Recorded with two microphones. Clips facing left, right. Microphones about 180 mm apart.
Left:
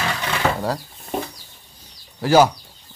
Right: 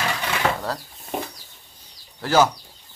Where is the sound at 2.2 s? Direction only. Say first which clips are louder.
Left 4 dB; 10° left (ahead or behind).